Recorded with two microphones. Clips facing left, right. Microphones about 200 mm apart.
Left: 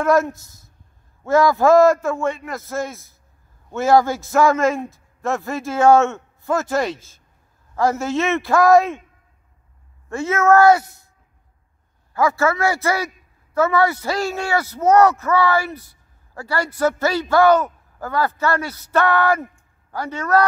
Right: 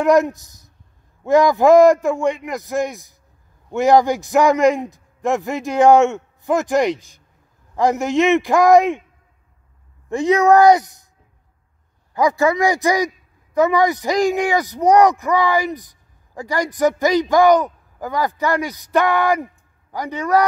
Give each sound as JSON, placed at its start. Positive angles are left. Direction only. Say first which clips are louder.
{"t": 0.0, "sound": "speech", "louder": "right 3 dB", "side_deg": -15}
{"t": 10.0, "sound": "speech", "louder": "right 3 dB", "side_deg": -15}
{"t": 12.1, "sound": "speech", "louder": "right 2 dB", "side_deg": -15}